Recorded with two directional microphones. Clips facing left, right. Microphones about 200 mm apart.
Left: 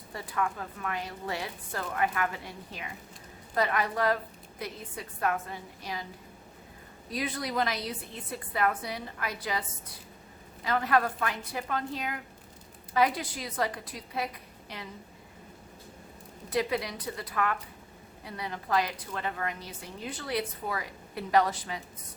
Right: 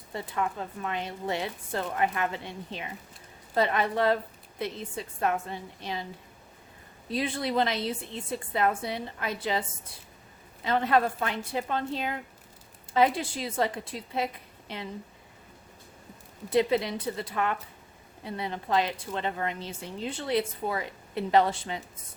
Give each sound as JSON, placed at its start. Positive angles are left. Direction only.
{"t": 0.1, "sound": "a woman's voice", "side_deg": -25}
{"t": 7.1, "sound": "a woman's voice", "side_deg": -30}
{"t": 16.5, "sound": "a woman's voice", "side_deg": -25}